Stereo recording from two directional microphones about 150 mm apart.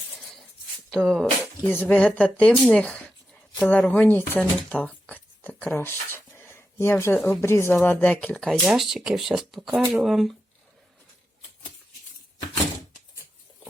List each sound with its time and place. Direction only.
0.1 s a sound: centre (ahead or behind)
0.9 s speech: centre (ahead or behind)
1.6 s speech: 10° left (ahead or behind)